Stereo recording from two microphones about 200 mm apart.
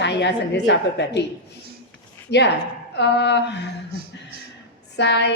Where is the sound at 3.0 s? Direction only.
60° left (ahead or behind).